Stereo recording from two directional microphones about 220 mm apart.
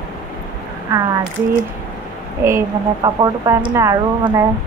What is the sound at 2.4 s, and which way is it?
Speech, 15° right (ahead or behind).